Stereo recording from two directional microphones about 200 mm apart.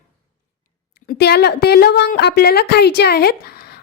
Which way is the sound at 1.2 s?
55° left (ahead or behind).